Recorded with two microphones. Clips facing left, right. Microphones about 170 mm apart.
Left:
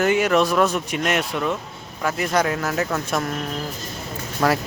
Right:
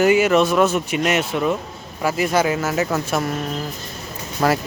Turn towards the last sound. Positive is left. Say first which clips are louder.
# right 1 dB
turn(degrees=-10)  # may be behind; listen again after turning